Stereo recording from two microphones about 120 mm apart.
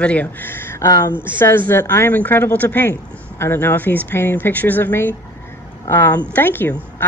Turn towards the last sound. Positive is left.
turn(degrees=15)  # may be behind; listen again after turning